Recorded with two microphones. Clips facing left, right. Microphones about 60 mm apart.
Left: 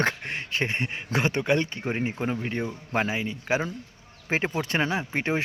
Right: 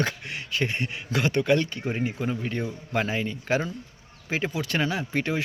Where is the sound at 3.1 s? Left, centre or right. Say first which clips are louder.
Right 1 dB; centre.